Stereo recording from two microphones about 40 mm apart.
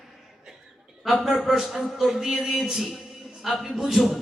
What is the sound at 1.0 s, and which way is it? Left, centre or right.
A man's voice, centre.